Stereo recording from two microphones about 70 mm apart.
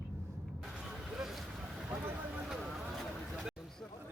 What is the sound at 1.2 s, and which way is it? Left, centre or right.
Vehicle, centre.